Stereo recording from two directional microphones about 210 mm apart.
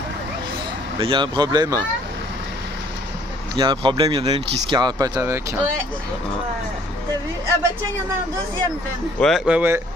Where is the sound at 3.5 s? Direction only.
20° right (ahead or behind).